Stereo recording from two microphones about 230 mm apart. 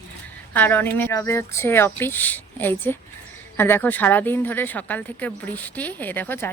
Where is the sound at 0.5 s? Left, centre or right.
Centre.